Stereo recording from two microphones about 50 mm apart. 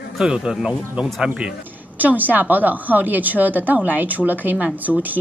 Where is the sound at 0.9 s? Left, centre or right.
Centre.